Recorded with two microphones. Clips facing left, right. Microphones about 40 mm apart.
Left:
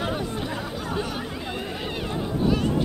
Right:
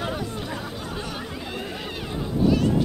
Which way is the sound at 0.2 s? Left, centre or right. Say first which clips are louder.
Left 2 dB; centre.